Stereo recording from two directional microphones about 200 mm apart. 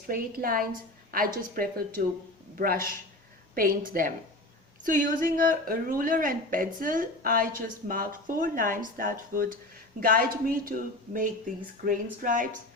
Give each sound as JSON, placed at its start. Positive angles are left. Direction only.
{"t": 0.1, "sound": "speech", "side_deg": -45}